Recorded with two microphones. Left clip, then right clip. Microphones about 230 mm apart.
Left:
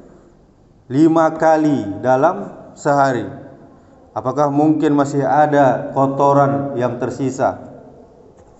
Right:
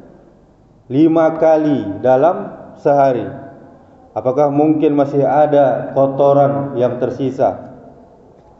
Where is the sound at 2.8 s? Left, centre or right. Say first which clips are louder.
Right 3 dB; left.